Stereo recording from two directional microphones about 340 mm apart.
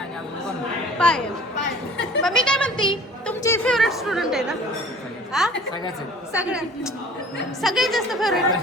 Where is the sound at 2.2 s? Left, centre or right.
Centre.